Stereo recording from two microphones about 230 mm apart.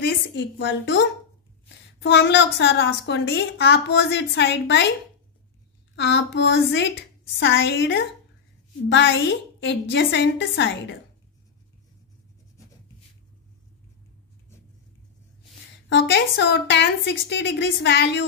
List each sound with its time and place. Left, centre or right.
0.0 s a woman's voice: left
5.9 s a woman's voice: left
15.9 s a woman's voice: left